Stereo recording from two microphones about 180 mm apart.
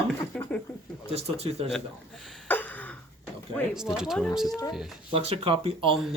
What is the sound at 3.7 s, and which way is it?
Speech, 5° right (ahead or behind).